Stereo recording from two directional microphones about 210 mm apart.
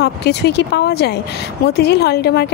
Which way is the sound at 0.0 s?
50° left (ahead or behind).